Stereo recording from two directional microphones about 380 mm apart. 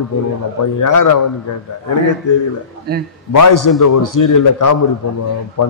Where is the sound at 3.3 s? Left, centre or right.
Left.